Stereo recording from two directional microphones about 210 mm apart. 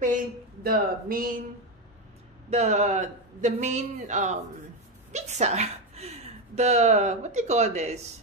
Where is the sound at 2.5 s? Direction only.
35° right (ahead or behind).